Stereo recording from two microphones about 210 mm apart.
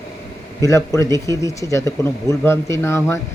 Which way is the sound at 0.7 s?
15° left (ahead or behind).